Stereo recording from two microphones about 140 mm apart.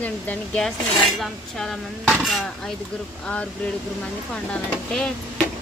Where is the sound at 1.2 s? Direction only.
5° left (ahead or behind).